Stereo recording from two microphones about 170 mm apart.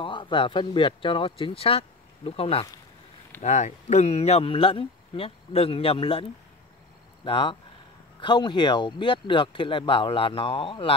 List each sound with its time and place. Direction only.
0.0 s speech: 30° left (ahead or behind)
7.2 s speech: 30° left (ahead or behind)